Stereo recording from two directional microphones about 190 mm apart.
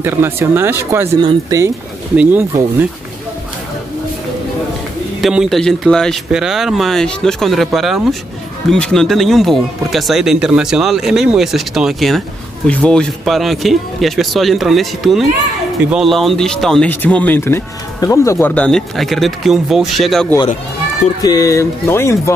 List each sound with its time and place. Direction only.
0.0 s speech: 10° right (ahead or behind)
5.2 s speech: centre (ahead or behind)
21.2 s speech: 20° left (ahead or behind)